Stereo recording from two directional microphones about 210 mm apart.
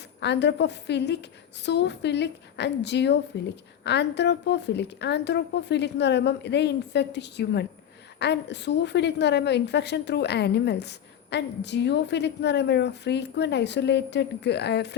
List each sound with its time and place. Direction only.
0.2 s a woman's voice: 55° left (ahead or behind)